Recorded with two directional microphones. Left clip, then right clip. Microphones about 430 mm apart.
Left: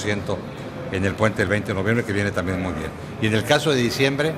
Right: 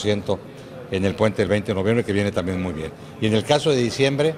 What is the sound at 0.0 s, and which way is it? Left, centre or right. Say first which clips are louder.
A man's voice: right 2 dB; centre.